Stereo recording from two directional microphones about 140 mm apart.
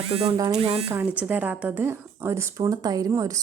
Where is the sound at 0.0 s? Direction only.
45° right (ahead or behind).